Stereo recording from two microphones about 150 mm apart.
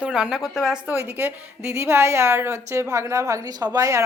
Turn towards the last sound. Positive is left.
turn(degrees=-20)  # may be behind; listen again after turning